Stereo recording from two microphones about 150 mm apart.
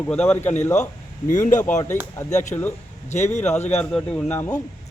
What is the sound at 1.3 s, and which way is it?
Speech, 60° left (ahead or behind).